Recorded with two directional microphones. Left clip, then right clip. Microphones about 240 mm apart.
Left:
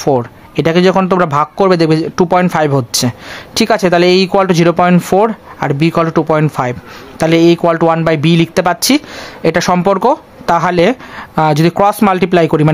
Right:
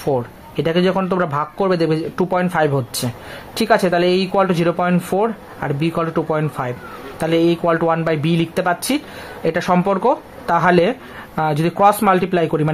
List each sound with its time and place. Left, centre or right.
0.0 s speech: left